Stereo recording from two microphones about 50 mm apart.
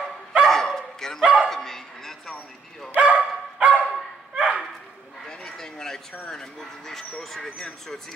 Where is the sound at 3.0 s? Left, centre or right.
Right.